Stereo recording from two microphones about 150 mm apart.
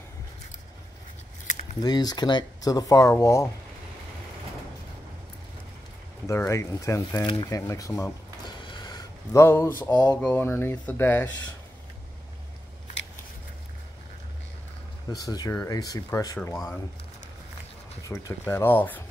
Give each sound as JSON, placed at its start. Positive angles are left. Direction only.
{"t": 1.8, "sound": "speech", "side_deg": 25}
{"t": 6.2, "sound": "speech", "side_deg": 20}
{"t": 15.0, "sound": "speech", "side_deg": 25}
{"t": 18.0, "sound": "speech", "side_deg": 20}